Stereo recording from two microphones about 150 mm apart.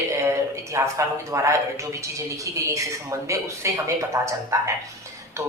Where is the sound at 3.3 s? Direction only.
20° right (ahead or behind).